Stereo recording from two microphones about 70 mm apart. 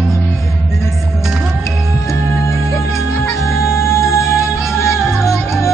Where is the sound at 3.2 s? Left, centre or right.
Left.